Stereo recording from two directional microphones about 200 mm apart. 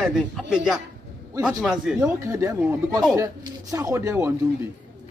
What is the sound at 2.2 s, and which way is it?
Speech, 15° right (ahead or behind).